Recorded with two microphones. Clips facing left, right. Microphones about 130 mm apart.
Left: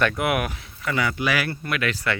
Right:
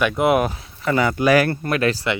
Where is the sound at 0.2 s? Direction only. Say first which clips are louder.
Right 7 dB; 25° right (ahead or behind).